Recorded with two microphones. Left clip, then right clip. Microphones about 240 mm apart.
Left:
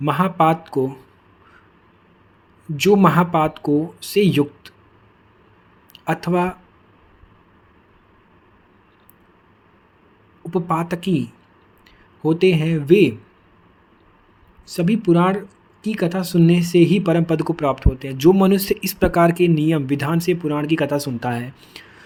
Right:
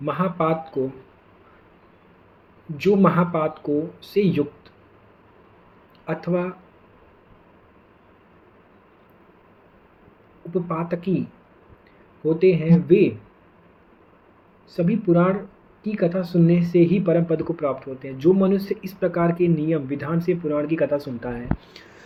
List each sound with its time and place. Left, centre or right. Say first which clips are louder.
0.0 s speech: left 6 dB; left
2.7 s speech: left 4 dB; left
5.9 s speech: left 4 dB; left
10.5 s speech: left 4 dB; left
12.2 s speech: left 1 dB; left
14.7 s speech: left 3 dB; left